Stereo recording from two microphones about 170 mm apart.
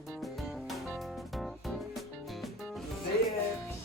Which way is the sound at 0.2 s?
Centre (ahead or behind).